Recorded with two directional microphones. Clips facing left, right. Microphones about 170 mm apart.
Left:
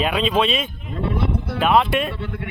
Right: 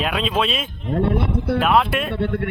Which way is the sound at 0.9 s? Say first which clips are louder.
Right 3 dB; 60° right (ahead or behind).